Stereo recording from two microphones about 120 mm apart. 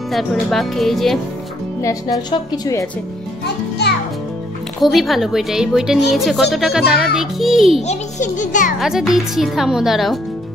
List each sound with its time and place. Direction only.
0.1 s a woman's voice: centre (ahead or behind)
1.8 s a woman's voice: 25° left (ahead or behind)
4.8 s a woman's voice: centre (ahead or behind)
7.8 s a child's voice: 80° left
8.7 s a woman's voice: 5° right (ahead or behind)